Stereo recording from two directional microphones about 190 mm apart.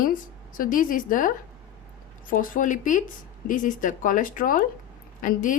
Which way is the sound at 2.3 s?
45° left (ahead or behind).